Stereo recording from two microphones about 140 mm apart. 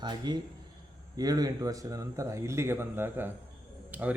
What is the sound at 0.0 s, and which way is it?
A man's voice, 30° right (ahead or behind).